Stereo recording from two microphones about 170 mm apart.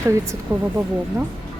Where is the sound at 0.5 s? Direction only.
20° right (ahead or behind).